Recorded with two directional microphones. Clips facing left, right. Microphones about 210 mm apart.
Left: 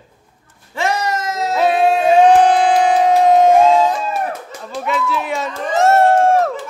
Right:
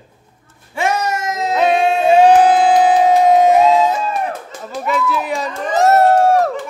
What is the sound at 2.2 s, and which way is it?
Music, 5° right (ahead or behind).